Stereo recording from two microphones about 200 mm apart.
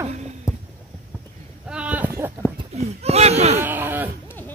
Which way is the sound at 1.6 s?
5° right (ahead or behind).